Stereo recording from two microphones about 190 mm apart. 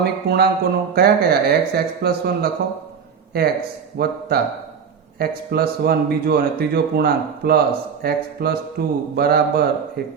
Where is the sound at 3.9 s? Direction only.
55° right (ahead or behind).